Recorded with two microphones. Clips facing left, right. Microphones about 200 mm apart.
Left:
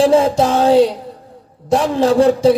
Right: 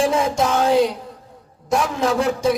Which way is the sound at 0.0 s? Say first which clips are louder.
Left 7 dB; 35° left (ahead or behind).